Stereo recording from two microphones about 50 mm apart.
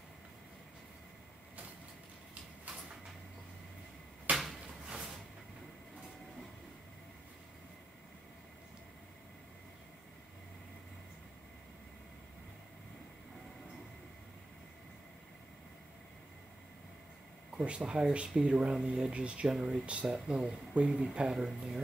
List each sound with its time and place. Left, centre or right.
4.8 s a sound: centre
17.6 s speech: centre
19.4 s speech: centre
19.7 s speech: right
21.3 s speech: centre